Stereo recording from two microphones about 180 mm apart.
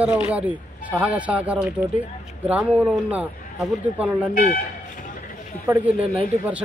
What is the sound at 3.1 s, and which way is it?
Speech, 10° right (ahead or behind).